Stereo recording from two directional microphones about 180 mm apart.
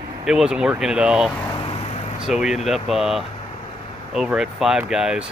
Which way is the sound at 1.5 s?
30° left (ahead or behind).